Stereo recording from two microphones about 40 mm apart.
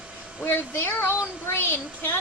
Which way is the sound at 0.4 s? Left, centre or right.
Left.